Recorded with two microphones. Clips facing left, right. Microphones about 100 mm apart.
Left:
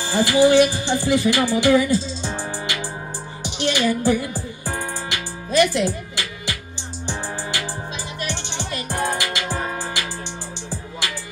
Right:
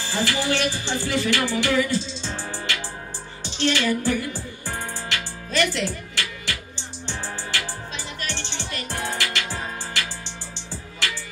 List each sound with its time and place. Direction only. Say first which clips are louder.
0.0 s music: left 9 dB; 15° left (ahead or behind)
8.2 s music: left 5 dB; 15° left (ahead or behind)